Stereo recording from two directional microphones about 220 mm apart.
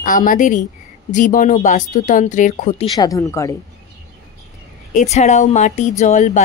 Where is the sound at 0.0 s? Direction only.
35° left (ahead or behind).